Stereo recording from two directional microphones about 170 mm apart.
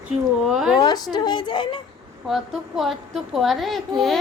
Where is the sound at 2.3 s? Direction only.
Centre (ahead or behind).